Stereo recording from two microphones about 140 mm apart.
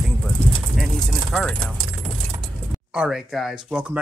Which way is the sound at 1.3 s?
5° left (ahead or behind).